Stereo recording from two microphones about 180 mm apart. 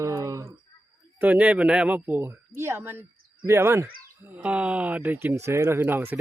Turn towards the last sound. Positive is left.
turn(degrees=-10)  # may be behind; listen again after turning